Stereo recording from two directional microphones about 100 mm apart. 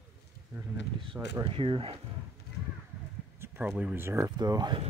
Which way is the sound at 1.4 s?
60° right (ahead or behind).